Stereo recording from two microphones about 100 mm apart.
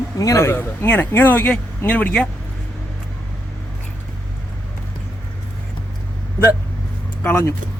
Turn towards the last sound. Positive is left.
turn(degrees=25)  # may be behind; listen again after turning